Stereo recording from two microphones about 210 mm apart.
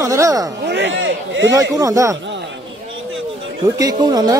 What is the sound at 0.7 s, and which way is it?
Speech, 60° right (ahead or behind).